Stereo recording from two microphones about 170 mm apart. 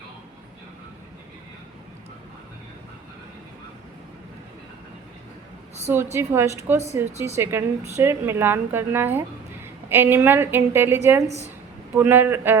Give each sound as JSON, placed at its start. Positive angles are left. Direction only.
{"t": 6.1, "sound": "a woman's voice", "side_deg": -15}